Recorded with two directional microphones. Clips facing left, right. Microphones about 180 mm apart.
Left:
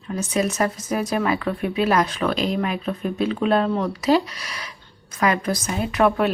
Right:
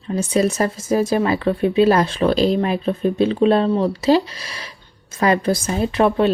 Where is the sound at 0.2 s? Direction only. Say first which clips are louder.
Right 4 dB; 30° right (ahead or behind).